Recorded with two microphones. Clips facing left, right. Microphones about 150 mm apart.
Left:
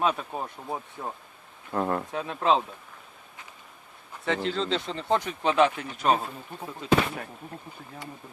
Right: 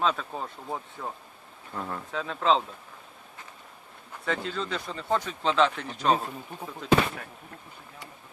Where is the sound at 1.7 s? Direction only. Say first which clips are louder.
Left 8 dB; 55° left (ahead or behind).